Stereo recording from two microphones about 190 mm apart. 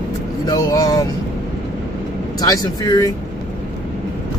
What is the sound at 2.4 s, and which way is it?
Speech, 20° left (ahead or behind).